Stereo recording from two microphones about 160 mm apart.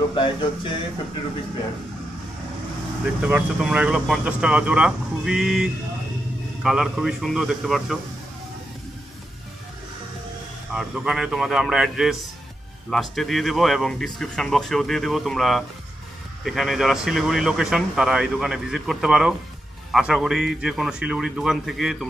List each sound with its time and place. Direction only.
0.1 s speech: 30° left (ahead or behind)
3.2 s speech: 5° right (ahead or behind)
10.7 s speech: 5° right (ahead or behind)